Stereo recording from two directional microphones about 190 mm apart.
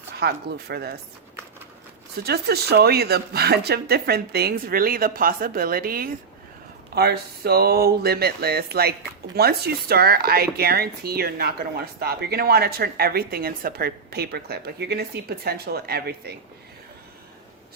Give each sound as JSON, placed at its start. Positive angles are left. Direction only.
{"t": 0.2, "sound": "speech", "side_deg": -55}
{"t": 2.2, "sound": "speech", "side_deg": -55}